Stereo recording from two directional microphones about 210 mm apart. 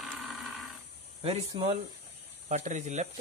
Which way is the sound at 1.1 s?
25° right (ahead or behind).